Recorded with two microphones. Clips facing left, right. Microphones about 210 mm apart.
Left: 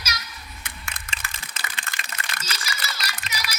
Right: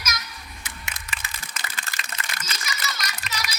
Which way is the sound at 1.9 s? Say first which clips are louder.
Even; 35° right (ahead or behind).